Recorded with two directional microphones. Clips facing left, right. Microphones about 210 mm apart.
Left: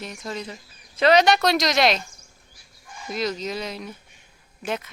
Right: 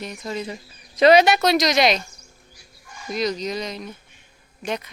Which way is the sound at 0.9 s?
10° right (ahead or behind).